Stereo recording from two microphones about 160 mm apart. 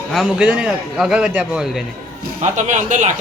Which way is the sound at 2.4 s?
45° right (ahead or behind).